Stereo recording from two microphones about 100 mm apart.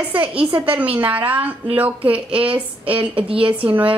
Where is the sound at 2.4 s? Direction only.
65° right (ahead or behind).